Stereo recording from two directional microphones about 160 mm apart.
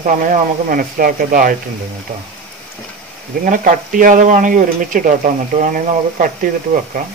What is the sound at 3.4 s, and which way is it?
Speech, 60° right (ahead or behind).